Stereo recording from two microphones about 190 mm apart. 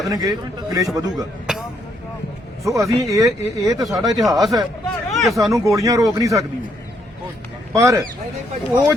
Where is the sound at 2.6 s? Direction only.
15° right (ahead or behind).